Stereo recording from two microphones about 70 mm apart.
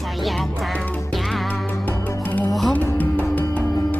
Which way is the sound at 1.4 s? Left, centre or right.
Left.